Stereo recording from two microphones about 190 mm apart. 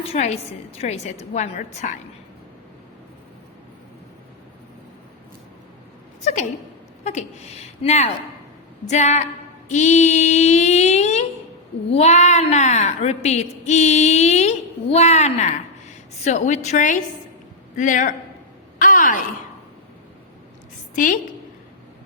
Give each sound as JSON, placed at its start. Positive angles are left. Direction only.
{"t": 0.1, "sound": "a woman's voice", "side_deg": 35}
{"t": 7.0, "sound": "a woman's voice", "side_deg": 35}
{"t": 9.6, "sound": "a sound", "side_deg": 40}
{"t": 11.9, "sound": "a woman's voice", "side_deg": 35}
{"t": 18.8, "sound": "a sound", "side_deg": 45}
{"t": 20.9, "sound": "a woman's voice", "side_deg": 45}